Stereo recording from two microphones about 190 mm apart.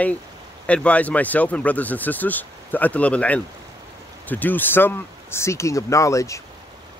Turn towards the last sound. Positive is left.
turn(degrees=15)  # may be behind; listen again after turning